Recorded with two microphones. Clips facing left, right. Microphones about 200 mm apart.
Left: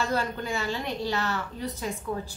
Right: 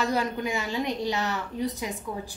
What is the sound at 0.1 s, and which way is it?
A woman's voice, 15° right (ahead or behind).